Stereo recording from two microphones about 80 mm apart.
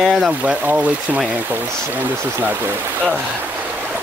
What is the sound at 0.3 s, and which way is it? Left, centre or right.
Speech, centre.